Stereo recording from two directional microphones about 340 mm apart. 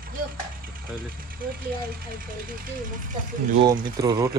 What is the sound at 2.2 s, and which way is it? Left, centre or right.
Speech, right.